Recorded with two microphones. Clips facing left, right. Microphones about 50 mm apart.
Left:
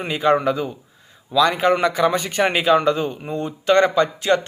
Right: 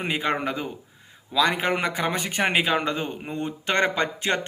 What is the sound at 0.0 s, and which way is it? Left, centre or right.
Speech, right.